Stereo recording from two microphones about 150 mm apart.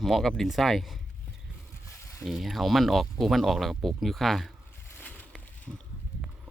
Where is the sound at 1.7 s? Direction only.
20° left (ahead or behind).